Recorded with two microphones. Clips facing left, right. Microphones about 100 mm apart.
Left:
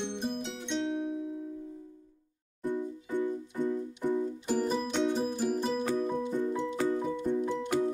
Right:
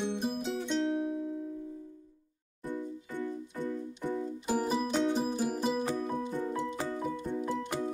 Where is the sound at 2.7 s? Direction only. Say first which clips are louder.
Left 5 dB; 15° left (ahead or behind).